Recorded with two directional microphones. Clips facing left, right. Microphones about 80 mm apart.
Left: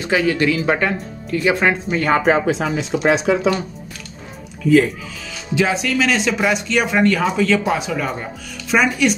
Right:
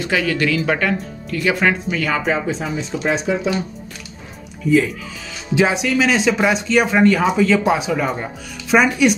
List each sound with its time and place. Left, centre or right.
0.0 s speech: left
2.0 s speech: left
2.2 s speech: left
5.5 s speech: right; by 9.1 s centre